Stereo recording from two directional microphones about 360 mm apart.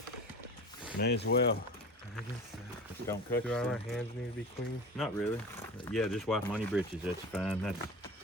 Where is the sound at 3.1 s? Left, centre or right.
Centre.